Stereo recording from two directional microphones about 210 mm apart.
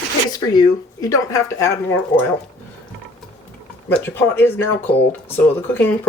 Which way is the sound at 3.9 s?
10° left (ahead or behind).